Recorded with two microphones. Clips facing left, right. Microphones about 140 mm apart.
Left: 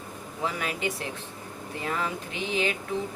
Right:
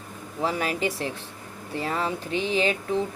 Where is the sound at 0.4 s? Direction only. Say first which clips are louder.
Right 4 dB; 30° right (ahead or behind).